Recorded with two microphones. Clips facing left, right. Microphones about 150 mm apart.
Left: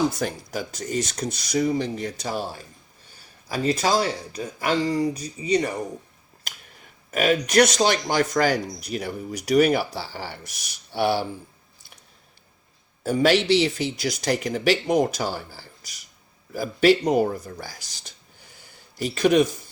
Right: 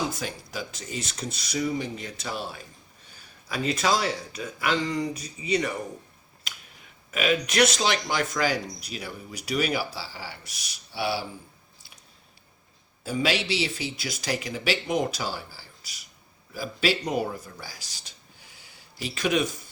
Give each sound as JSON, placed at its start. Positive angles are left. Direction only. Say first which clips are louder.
{"t": 0.2, "sound": "speech", "louder": "left 6 dB", "side_deg": 50}
{"t": 7.1, "sound": "speech", "louder": "left 5 dB", "side_deg": 45}
{"t": 13.0, "sound": "speech", "louder": "left 7 dB", "side_deg": 50}
{"t": 18.5, "sound": "a sound", "louder": "left 8 dB", "side_deg": 50}